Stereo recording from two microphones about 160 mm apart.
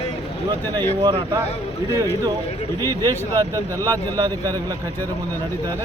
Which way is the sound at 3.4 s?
20° right (ahead or behind).